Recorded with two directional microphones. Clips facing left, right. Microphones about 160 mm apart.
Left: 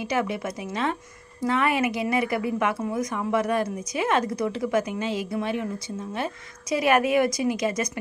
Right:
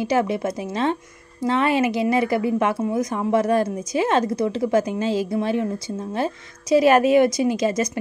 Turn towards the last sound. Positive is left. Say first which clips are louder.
# right 4 dB
turn(degrees=-30)  # may be behind; listen again after turning